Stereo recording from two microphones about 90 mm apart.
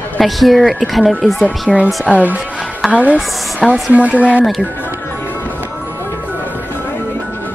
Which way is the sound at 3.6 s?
Centre (ahead or behind).